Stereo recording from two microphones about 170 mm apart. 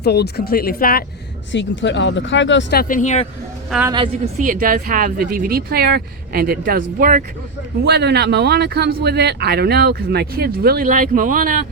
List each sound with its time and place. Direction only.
0.0 s speech: 75° left (ahead or behind)
1.5 s speech: 90° left
2.8 s speech: 50° left (ahead or behind)
4.4 s speech: 55° right (ahead or behind)
7.9 s speech: 75° right (ahead or behind); by 11.6 s 55° right (ahead or behind)